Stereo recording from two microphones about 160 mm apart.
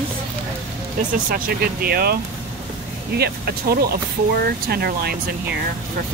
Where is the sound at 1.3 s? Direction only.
65° right (ahead or behind).